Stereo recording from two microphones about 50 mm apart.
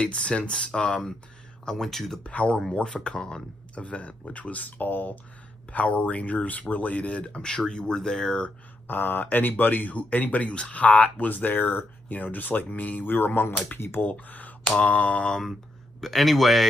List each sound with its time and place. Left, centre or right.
0.0 s speech: centre
1.7 s speech: centre
2.2 s speech: left
3.7 s speech: left
8.8 s speech: left
14.8 s speech: left
16.0 s speech: centre